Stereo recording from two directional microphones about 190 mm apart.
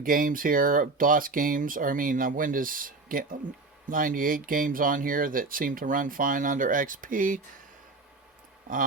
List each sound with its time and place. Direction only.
0.0 s speech: 45° right (ahead or behind)